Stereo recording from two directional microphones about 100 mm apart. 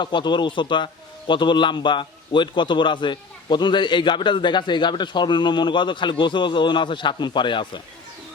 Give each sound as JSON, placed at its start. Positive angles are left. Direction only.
{"t": 0.0, "sound": "a man's voice", "side_deg": 50}